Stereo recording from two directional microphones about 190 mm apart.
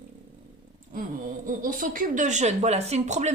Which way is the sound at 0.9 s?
45° right (ahead or behind).